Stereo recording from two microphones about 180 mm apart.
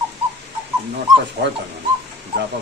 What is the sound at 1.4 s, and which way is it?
Speech, 65° right (ahead or behind).